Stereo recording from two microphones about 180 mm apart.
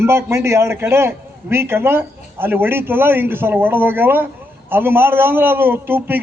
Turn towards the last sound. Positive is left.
turn(degrees=-10)  # may be behind; listen again after turning